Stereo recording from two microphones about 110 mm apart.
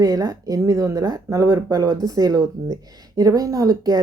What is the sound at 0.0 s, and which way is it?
Speech, 35° right (ahead or behind).